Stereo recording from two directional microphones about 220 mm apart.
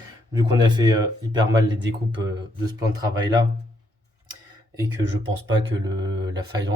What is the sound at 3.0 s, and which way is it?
Speech, 15° right (ahead or behind).